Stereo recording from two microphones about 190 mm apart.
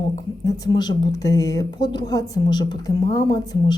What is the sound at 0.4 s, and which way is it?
A woman's voice, 20° left (ahead or behind).